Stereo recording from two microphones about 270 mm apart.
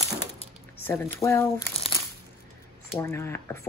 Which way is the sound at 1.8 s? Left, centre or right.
Left.